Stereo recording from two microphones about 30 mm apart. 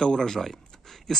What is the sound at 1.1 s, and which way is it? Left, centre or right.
Speech, centre.